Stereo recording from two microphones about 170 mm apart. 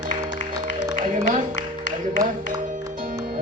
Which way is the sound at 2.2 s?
20° right (ahead or behind).